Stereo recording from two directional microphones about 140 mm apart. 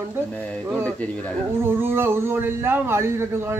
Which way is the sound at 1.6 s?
15° right (ahead or behind).